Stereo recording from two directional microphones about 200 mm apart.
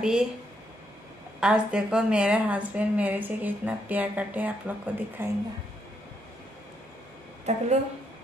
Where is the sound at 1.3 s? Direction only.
5° right (ahead or behind).